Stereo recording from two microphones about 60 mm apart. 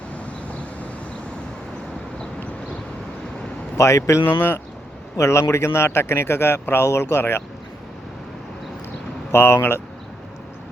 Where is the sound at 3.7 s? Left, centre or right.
Left.